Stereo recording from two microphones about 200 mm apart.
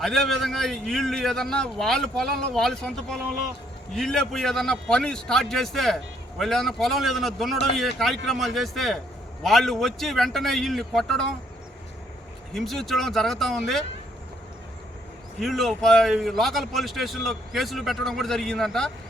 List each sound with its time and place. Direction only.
0.0 s a man's voice: centre (ahead or behind)
12.5 s a man's voice: centre (ahead or behind)
15.4 s a man's voice: centre (ahead or behind)